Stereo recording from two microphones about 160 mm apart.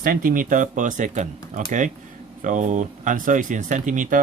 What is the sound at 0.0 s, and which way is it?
Speech, 65° right (ahead or behind).